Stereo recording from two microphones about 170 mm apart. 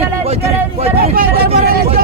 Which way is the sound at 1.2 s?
65° right (ahead or behind).